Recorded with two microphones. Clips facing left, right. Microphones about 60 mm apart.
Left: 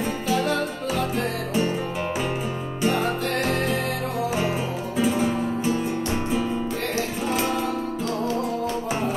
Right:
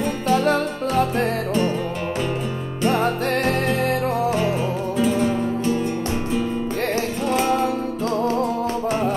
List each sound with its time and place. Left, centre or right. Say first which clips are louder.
0.3 s music: right 5 dB; right
4.9 s music: right 1 dB; centre